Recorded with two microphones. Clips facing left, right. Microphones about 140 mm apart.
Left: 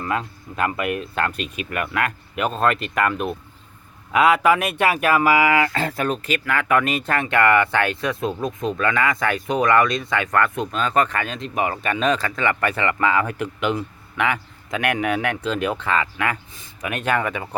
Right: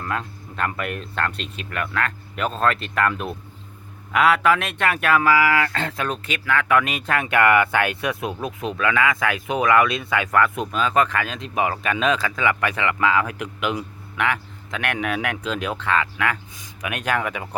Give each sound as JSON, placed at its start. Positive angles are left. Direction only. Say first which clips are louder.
{"t": 0.0, "sound": "speech", "louder": "left 3 dB", "side_deg": 5}
{"t": 5.3, "sound": "speech", "louder": "left 1 dB", "side_deg": 20}
{"t": 5.6, "sound": "speech", "louder": "left 3 dB", "side_deg": 5}